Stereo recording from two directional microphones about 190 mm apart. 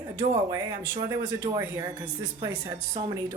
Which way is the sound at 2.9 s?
30° right (ahead or behind).